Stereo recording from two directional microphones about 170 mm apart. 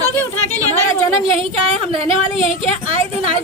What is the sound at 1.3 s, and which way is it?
A woman's voice, 35° right (ahead or behind).